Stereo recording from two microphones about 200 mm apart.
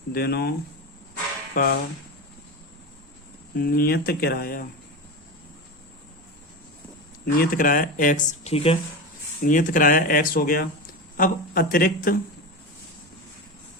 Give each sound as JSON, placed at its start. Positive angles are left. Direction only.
{"t": 0.1, "sound": "speech", "side_deg": 50}
{"t": 1.5, "sound": "speech", "side_deg": 50}
{"t": 3.6, "sound": "speech", "side_deg": 50}
{"t": 7.3, "sound": "speech", "side_deg": 45}
{"t": 9.4, "sound": "speech", "side_deg": 40}